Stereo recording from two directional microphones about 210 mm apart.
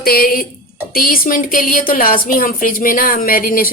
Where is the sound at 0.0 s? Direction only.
45° left (ahead or behind).